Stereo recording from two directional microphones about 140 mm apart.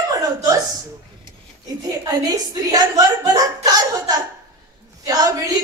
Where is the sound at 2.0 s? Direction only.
25° right (ahead or behind).